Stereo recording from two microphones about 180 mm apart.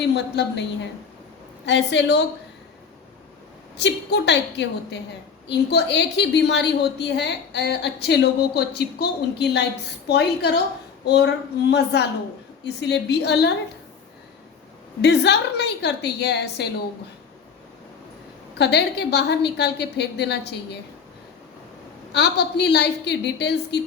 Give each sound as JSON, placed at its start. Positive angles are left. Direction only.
{"t": 0.0, "sound": "a woman's voice", "side_deg": 70}
{"t": 3.8, "sound": "a woman's voice", "side_deg": 75}
{"t": 11.0, "sound": "a sound", "side_deg": 70}
{"t": 11.7, "sound": "a woman's voice", "side_deg": 70}
{"t": 15.0, "sound": "a woman's voice", "side_deg": 70}
{"t": 18.5, "sound": "a woman's voice", "side_deg": 65}
{"t": 22.1, "sound": "a woman's voice", "side_deg": 70}